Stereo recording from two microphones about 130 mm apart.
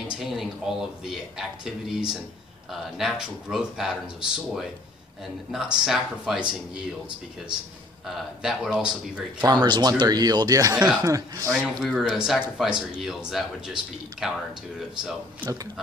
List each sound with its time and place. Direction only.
0.2 s a man's voice: centre (ahead or behind)
8.4 s speech: 5° right (ahead or behind)
9.5 s speech: 30° right (ahead or behind)
11.5 s a man's voice: centre (ahead or behind)
15.4 s speech: 30° right (ahead or behind)